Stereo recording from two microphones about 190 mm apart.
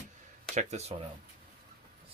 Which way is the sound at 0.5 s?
35° right (ahead or behind).